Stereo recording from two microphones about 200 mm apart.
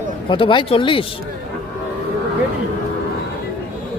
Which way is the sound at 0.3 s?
25° left (ahead or behind).